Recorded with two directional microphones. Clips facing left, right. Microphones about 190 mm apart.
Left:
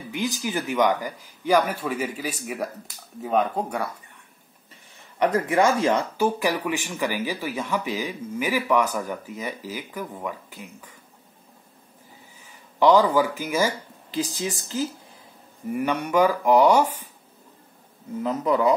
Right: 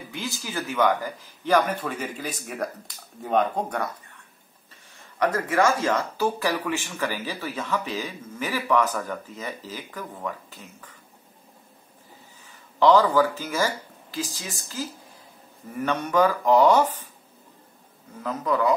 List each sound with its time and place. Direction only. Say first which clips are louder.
0.1 s speech: left 6 dB; 15° left (ahead or behind)
5.2 s speech: left 2 dB; 15° left (ahead or behind)
12.4 s speech: even; 15° left (ahead or behind)
18.2 s speech: left 2 dB; 20° left (ahead or behind)